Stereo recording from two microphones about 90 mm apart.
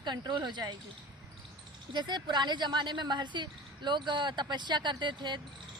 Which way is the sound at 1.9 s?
55° right (ahead or behind).